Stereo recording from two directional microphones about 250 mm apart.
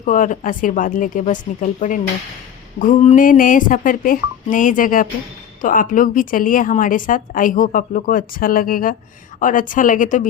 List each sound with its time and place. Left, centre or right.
0.0 s a woman's voice: left